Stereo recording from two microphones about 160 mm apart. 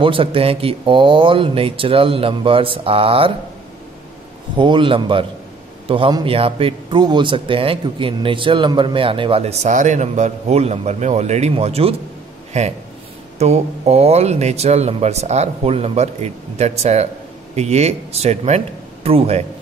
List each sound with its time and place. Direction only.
0.0 s a man's voice: 35° right (ahead or behind)
4.6 s a man's voice: 30° right (ahead or behind)